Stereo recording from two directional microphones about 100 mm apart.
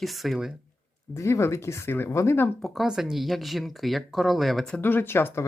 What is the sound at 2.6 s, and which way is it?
Speech, centre (ahead or behind).